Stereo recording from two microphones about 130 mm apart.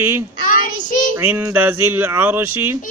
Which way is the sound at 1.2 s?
15° right (ahead or behind).